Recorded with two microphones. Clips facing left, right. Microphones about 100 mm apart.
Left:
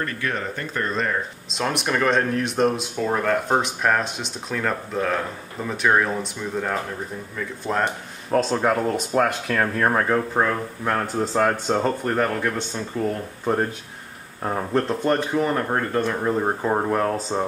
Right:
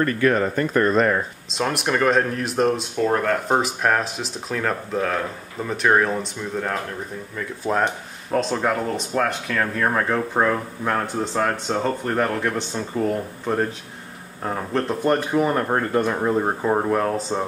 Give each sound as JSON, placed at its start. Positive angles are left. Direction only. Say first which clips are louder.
{"t": 0.0, "sound": "speech", "louder": "right 8 dB", "side_deg": -45}
{"t": 1.5, "sound": "speech", "louder": "right 1 dB", "side_deg": 0}
{"t": 7.6, "sound": "speech", "louder": "right 2 dB", "side_deg": -5}
{"t": 11.1, "sound": "speech", "louder": "left 2 dB", "side_deg": 5}
{"t": 14.4, "sound": "speech", "louder": "left 1 dB", "side_deg": 5}
{"t": 15.0, "sound": "speech", "louder": "right 2 dB", "side_deg": -10}